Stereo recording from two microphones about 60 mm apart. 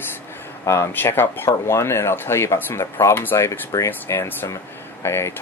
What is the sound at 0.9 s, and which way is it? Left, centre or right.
Speech, left.